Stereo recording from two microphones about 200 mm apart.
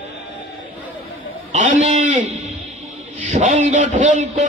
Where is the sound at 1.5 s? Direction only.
35° right (ahead or behind).